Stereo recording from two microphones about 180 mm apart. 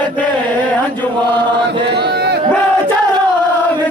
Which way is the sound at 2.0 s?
65° right (ahead or behind).